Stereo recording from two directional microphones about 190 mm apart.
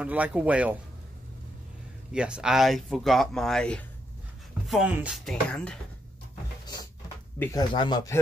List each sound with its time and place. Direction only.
0.0 s speech: 5° right (ahead or behind)
2.1 s speech: 5° right (ahead or behind)
7.3 s speech: 20° left (ahead or behind)